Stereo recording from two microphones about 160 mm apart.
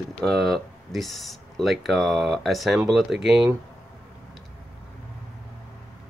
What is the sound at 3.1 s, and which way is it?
Speech, 90° right.